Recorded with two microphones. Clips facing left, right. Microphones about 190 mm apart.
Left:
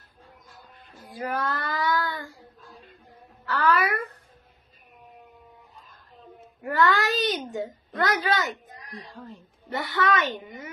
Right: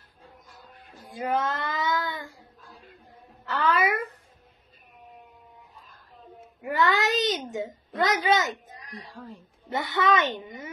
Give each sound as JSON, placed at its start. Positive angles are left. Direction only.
{"t": 1.0, "sound": "child singing", "side_deg": -25}
{"t": 3.4, "sound": "a sound", "side_deg": -20}
{"t": 6.6, "sound": "speech", "side_deg": -20}
{"t": 9.7, "sound": "speech", "side_deg": -25}